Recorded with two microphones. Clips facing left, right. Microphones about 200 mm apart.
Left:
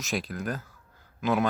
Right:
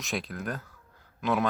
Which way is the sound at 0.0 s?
Centre (ahead or behind).